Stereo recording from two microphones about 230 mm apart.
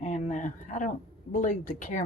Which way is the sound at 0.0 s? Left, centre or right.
Left.